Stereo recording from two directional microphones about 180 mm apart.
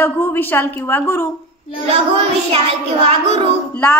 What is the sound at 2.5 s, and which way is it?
Child singing, 35° right (ahead or behind).